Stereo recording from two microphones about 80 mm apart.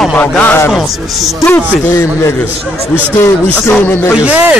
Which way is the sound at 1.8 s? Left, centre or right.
Left.